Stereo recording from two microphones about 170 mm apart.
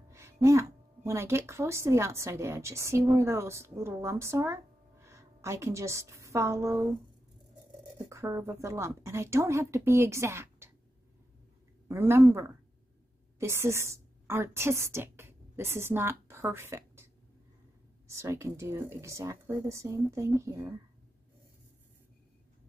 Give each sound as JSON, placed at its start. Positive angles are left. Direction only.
{"t": 0.1, "sound": "a woman's voice", "side_deg": -15}
{"t": 8.1, "sound": "a woman's voice", "side_deg": -15}
{"t": 11.9, "sound": "a woman's voice", "side_deg": -15}